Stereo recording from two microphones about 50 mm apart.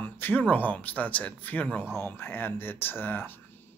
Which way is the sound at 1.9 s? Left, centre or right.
Left.